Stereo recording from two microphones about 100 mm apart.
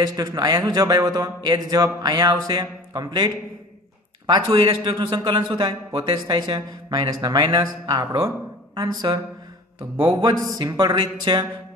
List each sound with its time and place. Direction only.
0.0 s a man's voice: 40° right (ahead or behind)
10.2 s a man's voice: 40° right (ahead or behind)